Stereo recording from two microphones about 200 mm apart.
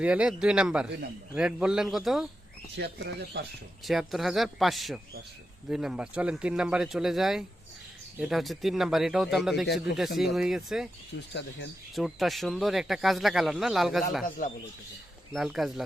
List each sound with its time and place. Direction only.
0.0 s speech: 5° right (ahead or behind)
2.7 s speech: 60° right (ahead or behind)
3.8 s speech: centre (ahead or behind)
11.3 s speech: 60° left (ahead or behind)
11.9 s speech: centre (ahead or behind)
14.4 s speech: 40° left (ahead or behind)
15.3 s speech: centre (ahead or behind)